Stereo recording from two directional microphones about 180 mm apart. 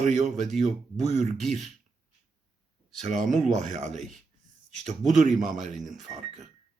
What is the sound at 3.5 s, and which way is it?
Speech, 40° right (ahead or behind).